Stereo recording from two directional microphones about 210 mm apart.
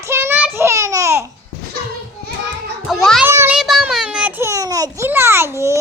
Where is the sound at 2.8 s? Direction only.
Centre (ahead or behind).